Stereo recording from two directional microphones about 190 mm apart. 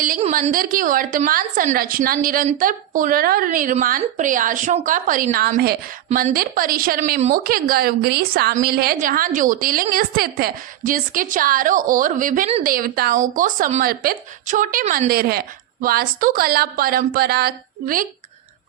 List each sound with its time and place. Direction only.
0.5 s a woman's voice: 45° right (ahead or behind)